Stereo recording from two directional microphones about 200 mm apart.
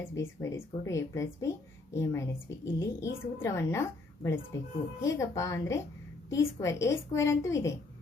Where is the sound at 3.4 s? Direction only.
15° left (ahead or behind).